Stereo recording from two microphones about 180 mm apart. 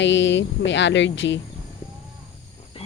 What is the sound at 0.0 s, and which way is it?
Speech, 85° left.